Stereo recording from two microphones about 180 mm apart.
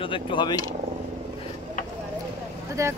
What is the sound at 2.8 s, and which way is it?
Speech, 15° right (ahead or behind).